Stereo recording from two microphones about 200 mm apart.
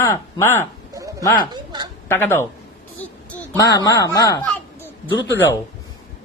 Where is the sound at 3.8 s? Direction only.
15° left (ahead or behind).